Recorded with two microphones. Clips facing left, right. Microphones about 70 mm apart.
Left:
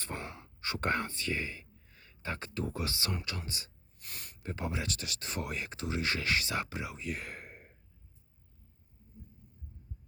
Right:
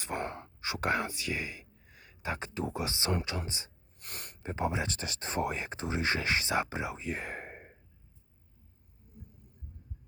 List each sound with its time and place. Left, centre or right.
0.2 s whispering: right
0.6 s speech: centre
4.0 s speech: right
4.4 s speech: right
9.2 s a sound: right